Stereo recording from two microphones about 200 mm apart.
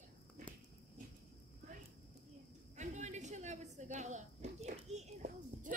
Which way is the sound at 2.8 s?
35° right (ahead or behind).